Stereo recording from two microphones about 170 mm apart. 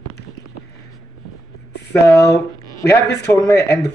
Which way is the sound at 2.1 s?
20° left (ahead or behind).